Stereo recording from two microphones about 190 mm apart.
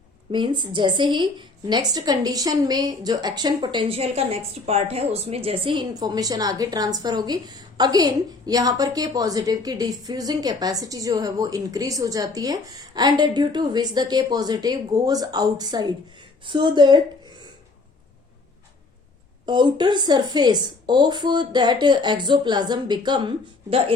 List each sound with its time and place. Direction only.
0.3 s a woman's voice: 25° right (ahead or behind)
19.5 s a woman's voice: 25° right (ahead or behind)